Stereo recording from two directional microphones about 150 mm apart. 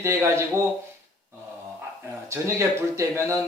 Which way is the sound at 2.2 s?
20° right (ahead or behind).